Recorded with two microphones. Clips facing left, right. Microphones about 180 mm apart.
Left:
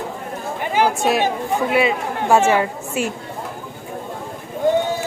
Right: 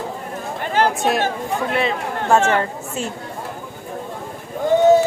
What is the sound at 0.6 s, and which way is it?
Chatter, 10° left (ahead or behind).